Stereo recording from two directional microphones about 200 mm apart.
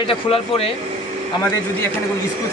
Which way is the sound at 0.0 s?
30° left (ahead or behind).